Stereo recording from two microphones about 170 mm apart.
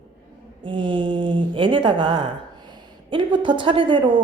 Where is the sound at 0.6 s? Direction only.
30° right (ahead or behind).